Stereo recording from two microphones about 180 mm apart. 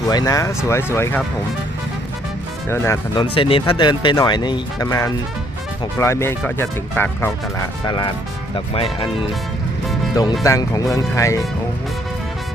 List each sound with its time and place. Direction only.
0.1 s speech: 20° left (ahead or behind)
2.6 s speech: 15° left (ahead or behind)
3.2 s speech: 30° left (ahead or behind); by 7.3 s 10° left (ahead or behind)
7.9 s speech: 25° left (ahead or behind)
10.4 s speech: 20° left (ahead or behind)